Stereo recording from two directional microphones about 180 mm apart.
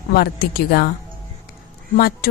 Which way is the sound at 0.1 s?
60° left (ahead or behind).